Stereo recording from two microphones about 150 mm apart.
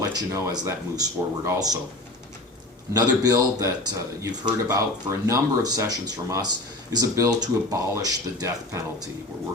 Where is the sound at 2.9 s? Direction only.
25° right (ahead or behind).